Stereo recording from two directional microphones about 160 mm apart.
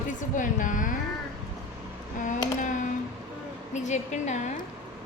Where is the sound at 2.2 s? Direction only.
50° left (ahead or behind).